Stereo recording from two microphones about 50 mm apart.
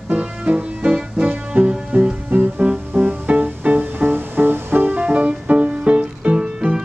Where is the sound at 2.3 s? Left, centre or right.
Right.